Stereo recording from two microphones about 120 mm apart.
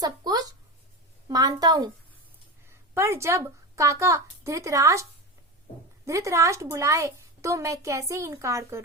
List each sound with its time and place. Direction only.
0.0 s a sound: 35° right (ahead or behind)
1.3 s a woman's voice: 30° right (ahead or behind)
2.9 s a woman's voice: 20° right (ahead or behind)
6.1 s a woman's voice: 25° right (ahead or behind)